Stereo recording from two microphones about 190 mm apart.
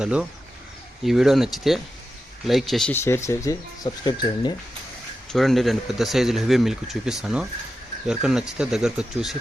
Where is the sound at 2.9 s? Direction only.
15° left (ahead or behind).